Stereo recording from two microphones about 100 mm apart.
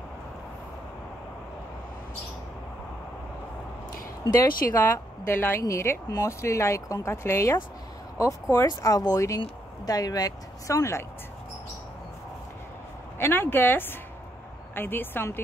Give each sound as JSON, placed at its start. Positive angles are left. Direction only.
{"t": 4.7, "sound": "speech", "side_deg": 25}
{"t": 13.2, "sound": "speech", "side_deg": 20}